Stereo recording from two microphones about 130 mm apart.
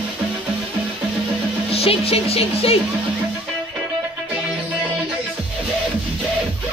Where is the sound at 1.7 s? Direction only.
50° left (ahead or behind).